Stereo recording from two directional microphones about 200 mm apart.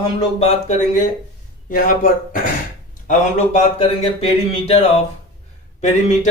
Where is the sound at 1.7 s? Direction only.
45° left (ahead or behind).